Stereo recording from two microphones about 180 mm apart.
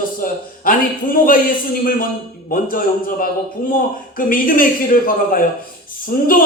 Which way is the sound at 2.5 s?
50° left (ahead or behind).